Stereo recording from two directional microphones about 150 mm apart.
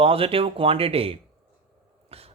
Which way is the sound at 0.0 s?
40° right (ahead or behind).